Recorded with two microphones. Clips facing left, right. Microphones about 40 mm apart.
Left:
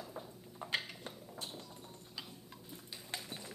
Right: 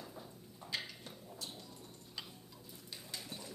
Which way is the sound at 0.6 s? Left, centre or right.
Left.